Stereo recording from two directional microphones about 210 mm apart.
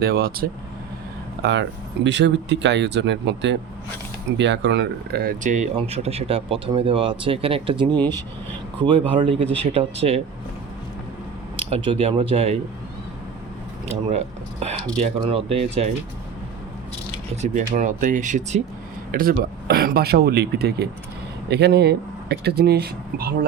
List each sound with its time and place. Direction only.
0.0 s speech: 45° right (ahead or behind); by 7.9 s 25° right (ahead or behind)
7.9 s speech: 10° left (ahead or behind)
8.8 s speech: 25° right (ahead or behind)
11.6 s speech: 25° right (ahead or behind)
13.8 s speech: 30° right (ahead or behind)
17.4 s speech: 35° right (ahead or behind)